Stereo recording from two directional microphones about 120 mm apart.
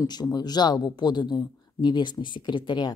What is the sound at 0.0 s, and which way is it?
Speech, 35° left (ahead or behind).